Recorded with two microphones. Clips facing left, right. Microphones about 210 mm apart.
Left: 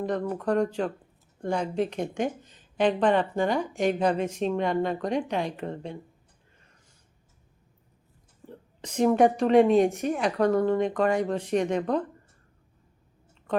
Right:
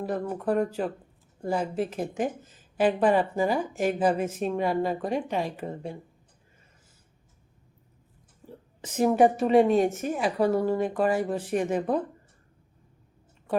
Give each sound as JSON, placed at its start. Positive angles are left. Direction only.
{"t": 0.0, "sound": "speech", "side_deg": -5}
{"t": 8.4, "sound": "speech", "side_deg": -5}